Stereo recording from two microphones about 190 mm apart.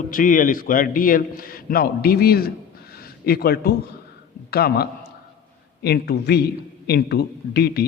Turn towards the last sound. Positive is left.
turn(degrees=55)  # may be behind; listen again after turning